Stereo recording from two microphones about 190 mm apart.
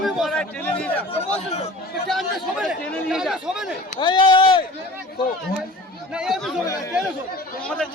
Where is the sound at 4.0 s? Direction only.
25° left (ahead or behind).